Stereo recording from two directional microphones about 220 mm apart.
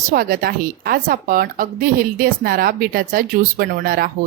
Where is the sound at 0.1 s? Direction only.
40° right (ahead or behind).